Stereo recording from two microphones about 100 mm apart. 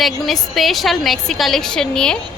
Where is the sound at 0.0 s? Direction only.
Centre (ahead or behind).